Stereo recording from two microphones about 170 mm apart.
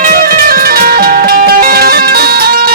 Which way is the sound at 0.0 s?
55° right (ahead or behind).